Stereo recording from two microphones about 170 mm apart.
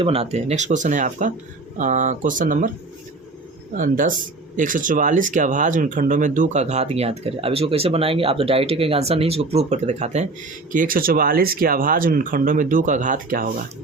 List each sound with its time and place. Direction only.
0.0 s speech: 35° right (ahead or behind); by 2.6 s 50° right (ahead or behind)
3.8 s speech: 50° right (ahead or behind)
10.7 s speech: 55° right (ahead or behind)